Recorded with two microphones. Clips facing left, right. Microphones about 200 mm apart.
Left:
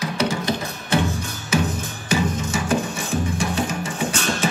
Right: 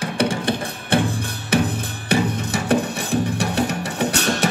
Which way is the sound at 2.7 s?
65° right (ahead or behind).